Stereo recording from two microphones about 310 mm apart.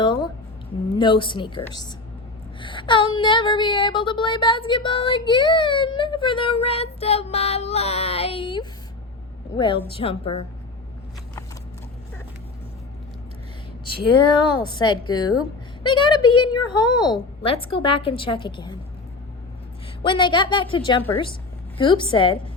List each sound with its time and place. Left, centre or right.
0.0 s a sound: centre
0.9 s child singing: centre
14.4 s a woman's voice: left
14.8 s child singing: centre
15.1 s a woman's voice: left
15.8 s child singing: centre
16.6 s a woman's voice: left
17.4 s child singing: centre
20.0 s child singing: centre